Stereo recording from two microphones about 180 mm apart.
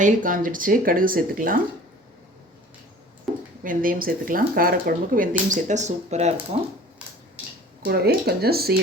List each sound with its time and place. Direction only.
0.0 s speech: 45° right (ahead or behind)
3.6 s speech: 50° right (ahead or behind)
5.5 s speech: 40° right (ahead or behind)
7.9 s speech: 60° right (ahead or behind)